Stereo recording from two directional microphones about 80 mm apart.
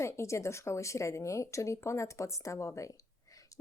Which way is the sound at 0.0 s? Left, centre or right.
Left.